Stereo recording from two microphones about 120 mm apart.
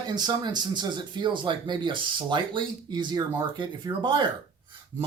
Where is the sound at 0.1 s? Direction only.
35° right (ahead or behind).